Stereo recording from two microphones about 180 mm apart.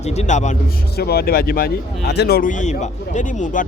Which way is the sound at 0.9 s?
60° left (ahead or behind).